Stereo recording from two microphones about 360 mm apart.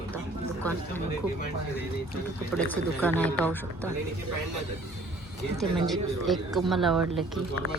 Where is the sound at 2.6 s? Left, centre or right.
Centre.